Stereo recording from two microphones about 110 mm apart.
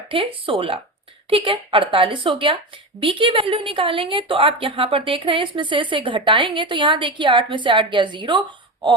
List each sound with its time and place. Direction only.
0.1 s a woman's voice: 55° right (ahead or behind)